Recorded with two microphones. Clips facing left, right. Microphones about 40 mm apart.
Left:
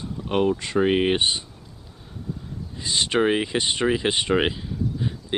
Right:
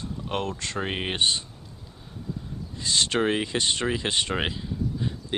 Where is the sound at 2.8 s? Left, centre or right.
Centre.